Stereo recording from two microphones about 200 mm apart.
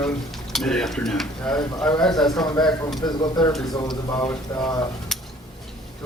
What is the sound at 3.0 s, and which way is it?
Speech, 20° left (ahead or behind).